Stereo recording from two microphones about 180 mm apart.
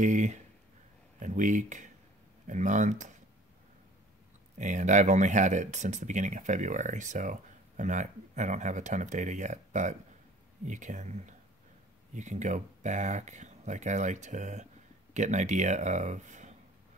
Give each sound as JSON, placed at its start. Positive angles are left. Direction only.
{"t": 0.0, "sound": "speech", "side_deg": -40}
{"t": 4.6, "sound": "speech", "side_deg": -45}